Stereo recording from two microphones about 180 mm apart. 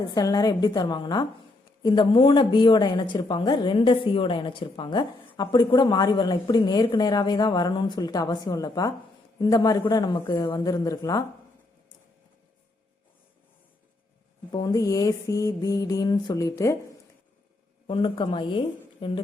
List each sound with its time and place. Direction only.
0.0 s a woman's voice: 20° left (ahead or behind)
14.5 s a woman's voice: 20° left (ahead or behind)
17.8 s a woman's voice: 30° left (ahead or behind)